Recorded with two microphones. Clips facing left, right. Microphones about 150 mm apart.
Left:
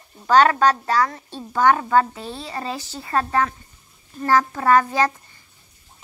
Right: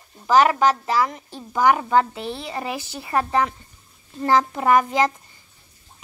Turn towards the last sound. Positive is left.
turn(degrees=-15)  # may be behind; listen again after turning